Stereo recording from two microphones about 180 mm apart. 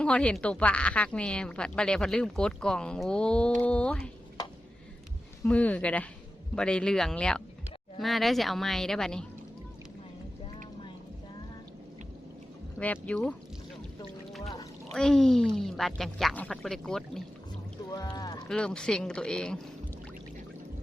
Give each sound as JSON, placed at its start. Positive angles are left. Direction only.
{"t": 0.0, "sound": "a woman's voice", "side_deg": 5}
{"t": 5.4, "sound": "a woman's voice", "side_deg": 10}
{"t": 12.8, "sound": "speech", "side_deg": 10}
{"t": 14.9, "sound": "a woman's voice", "side_deg": 0}
{"t": 17.9, "sound": "speech", "side_deg": 20}
{"t": 18.4, "sound": "a woman's voice", "side_deg": 5}